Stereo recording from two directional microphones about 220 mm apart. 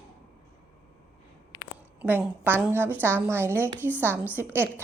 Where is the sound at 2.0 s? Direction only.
10° right (ahead or behind).